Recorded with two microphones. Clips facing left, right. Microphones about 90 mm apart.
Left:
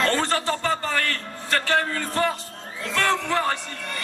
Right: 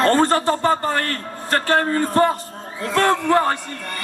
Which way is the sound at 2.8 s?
45° right (ahead or behind).